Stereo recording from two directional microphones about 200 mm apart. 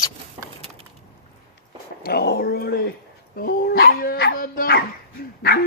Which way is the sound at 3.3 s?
45° left (ahead or behind).